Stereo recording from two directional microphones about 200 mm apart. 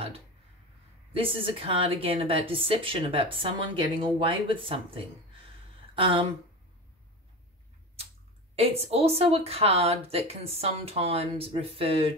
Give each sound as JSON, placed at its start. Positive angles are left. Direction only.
{"t": 1.1, "sound": "a woman's voice", "side_deg": -25}
{"t": 8.5, "sound": "a woman's voice", "side_deg": -30}